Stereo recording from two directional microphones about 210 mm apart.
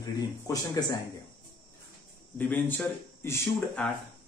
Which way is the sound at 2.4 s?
10° left (ahead or behind).